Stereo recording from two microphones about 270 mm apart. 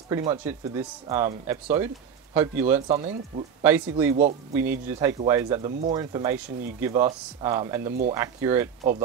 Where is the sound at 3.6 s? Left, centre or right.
Centre.